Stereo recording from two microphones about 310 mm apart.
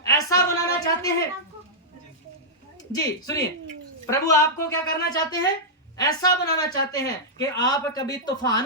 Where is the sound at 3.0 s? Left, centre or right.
Centre.